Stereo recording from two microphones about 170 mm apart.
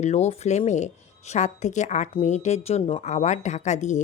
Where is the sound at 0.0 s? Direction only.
40° left (ahead or behind).